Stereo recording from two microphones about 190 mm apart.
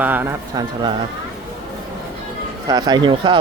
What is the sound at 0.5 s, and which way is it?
Speech, 20° right (ahead or behind).